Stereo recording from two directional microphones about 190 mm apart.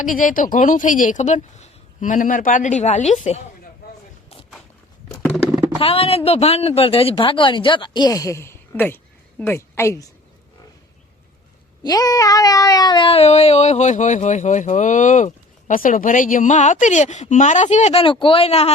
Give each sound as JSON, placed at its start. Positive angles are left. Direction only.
{"t": 0.0, "sound": "speech", "side_deg": 45}
{"t": 5.8, "sound": "a woman's voice", "side_deg": 30}
{"t": 11.8, "sound": "cat", "side_deg": 20}